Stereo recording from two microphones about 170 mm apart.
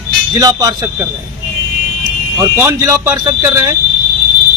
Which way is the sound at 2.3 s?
20° right (ahead or behind).